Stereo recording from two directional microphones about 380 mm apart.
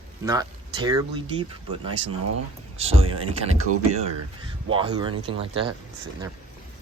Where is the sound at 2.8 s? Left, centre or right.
Centre.